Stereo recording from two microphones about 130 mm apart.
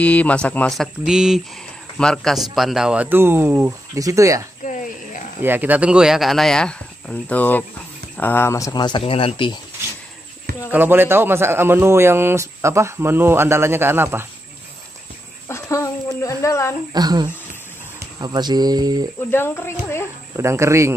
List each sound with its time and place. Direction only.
0.0 s speech: 10° left (ahead or behind)
0.7 s a man's voice: 5° right (ahead or behind); by 4.5 s 25° right (ahead or behind)
4.6 s a sound: 85° left
5.4 s speech: 15° right (ahead or behind); by 9.0 s 35° left (ahead or behind)
9.0 s speech: 45° left (ahead or behind)
9.8 s dog: 20° right (ahead or behind)
10.7 s a man's voice: 15° right (ahead or behind)
15.4 s a sound: 20° left (ahead or behind)
16.9 s speech: 30° right (ahead or behind)
19.3 s speech: 20° left (ahead or behind)
20.3 s speech: 20° right (ahead or behind)